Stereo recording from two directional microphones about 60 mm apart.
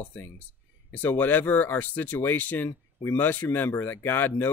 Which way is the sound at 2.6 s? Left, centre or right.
Left.